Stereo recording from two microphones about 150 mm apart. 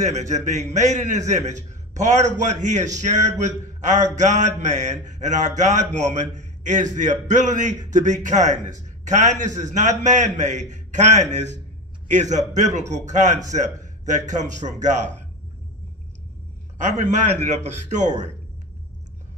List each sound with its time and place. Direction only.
0.0 s a man's voice: 50° right (ahead or behind)
16.7 s a man's voice: 55° right (ahead or behind)